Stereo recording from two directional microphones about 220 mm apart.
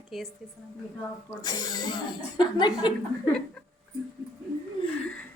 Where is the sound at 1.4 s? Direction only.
20° left (ahead or behind).